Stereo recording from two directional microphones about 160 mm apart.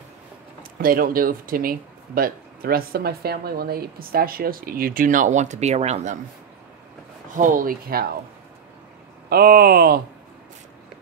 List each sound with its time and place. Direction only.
0.6 s speech: 65° right (ahead or behind); by 6.1 s 45° right (ahead or behind)
7.3 s speech: 55° right (ahead or behind)
9.3 s speech: 75° right (ahead or behind)